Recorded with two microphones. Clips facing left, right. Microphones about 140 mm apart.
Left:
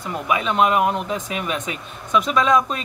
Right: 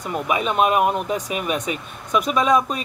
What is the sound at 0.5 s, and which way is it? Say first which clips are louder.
Speech: even; 10° right (ahead or behind).